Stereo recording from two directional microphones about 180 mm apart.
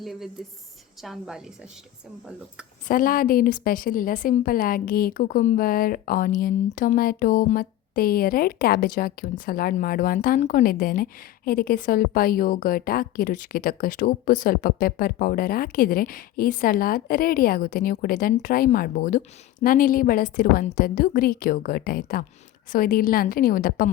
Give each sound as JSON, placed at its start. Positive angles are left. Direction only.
{"t": 0.0, "sound": "a woman's voice", "side_deg": 0}
{"t": 2.9, "sound": "a woman's voice", "side_deg": 50}